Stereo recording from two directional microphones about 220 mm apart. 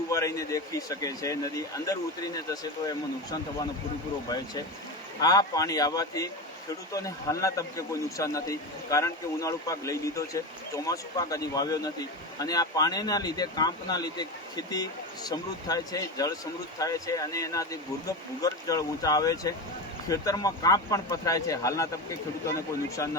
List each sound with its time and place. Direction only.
0.1 s speech: 15° left (ahead or behind)
5.2 s speech: 15° left (ahead or behind)